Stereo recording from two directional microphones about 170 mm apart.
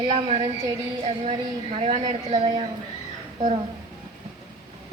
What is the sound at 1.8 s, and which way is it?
Speech, 40° right (ahead or behind).